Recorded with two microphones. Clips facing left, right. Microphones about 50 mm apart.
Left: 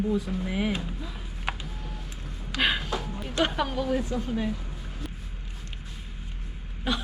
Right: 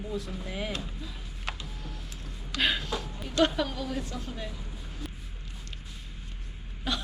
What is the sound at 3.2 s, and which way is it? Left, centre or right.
Speech, centre.